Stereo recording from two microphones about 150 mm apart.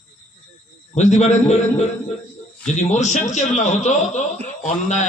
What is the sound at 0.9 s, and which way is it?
A man's voice, 50° left (ahead or behind).